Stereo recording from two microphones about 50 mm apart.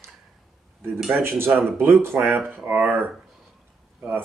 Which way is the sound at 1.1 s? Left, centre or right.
Right.